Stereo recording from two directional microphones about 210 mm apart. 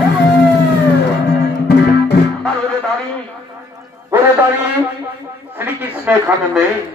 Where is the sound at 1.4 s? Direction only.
50° left (ahead or behind).